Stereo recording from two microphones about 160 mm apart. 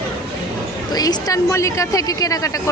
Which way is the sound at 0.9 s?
25° left (ahead or behind).